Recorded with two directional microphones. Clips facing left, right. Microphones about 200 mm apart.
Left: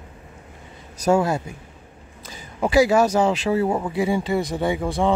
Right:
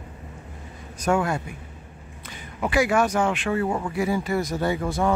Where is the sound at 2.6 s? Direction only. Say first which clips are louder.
Left 5 dB; 35° left (ahead or behind).